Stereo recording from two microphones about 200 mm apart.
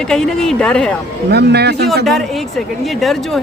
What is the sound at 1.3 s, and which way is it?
Speech, 55° right (ahead or behind).